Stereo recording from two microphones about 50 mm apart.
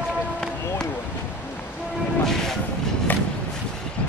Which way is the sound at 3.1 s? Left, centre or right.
Left.